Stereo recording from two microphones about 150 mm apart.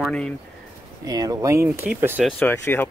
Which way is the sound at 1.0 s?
25° right (ahead or behind).